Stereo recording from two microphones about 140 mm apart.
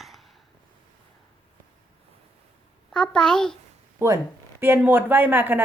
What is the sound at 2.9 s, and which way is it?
Speech, 5° left (ahead or behind).